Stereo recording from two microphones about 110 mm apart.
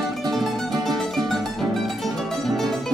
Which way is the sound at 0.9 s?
Centre (ahead or behind).